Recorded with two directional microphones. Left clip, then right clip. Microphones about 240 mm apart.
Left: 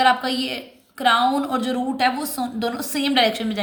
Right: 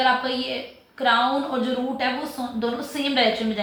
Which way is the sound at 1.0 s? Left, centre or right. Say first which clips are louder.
Left 2 dB; left.